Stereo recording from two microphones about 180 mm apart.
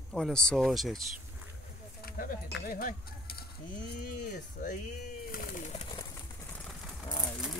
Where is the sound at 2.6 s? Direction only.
50° left (ahead or behind).